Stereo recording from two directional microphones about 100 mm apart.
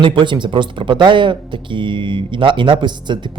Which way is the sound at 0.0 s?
55° right (ahead or behind).